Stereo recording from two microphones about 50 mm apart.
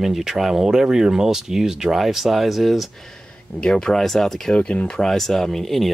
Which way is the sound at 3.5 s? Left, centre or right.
Centre.